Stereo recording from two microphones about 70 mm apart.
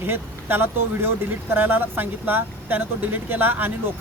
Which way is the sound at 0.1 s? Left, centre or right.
Right.